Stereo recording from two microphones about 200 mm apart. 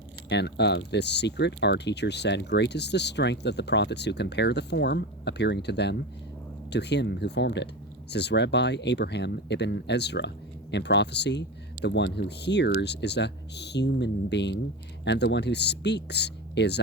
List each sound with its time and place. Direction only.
0.3 s speech: 60° left (ahead or behind)